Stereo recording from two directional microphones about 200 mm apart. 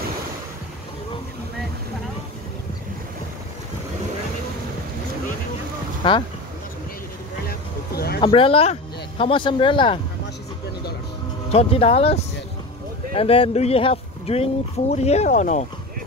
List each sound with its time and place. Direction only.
6.0 s speech: 25° left (ahead or behind)
7.4 s vehicle: 50° left (ahead or behind)
8.2 s speech: 25° left (ahead or behind)
11.5 s speech: 30° left (ahead or behind)